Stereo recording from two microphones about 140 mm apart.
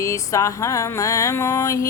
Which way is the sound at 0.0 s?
20° left (ahead or behind).